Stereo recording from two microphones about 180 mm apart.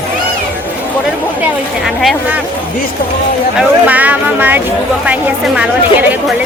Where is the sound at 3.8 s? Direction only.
10° right (ahead or behind).